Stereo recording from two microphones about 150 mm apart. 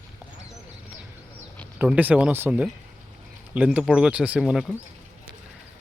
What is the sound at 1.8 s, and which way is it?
Speech, 10° right (ahead or behind).